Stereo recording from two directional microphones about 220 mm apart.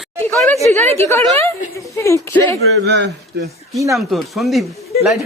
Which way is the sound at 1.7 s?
15° left (ahead or behind).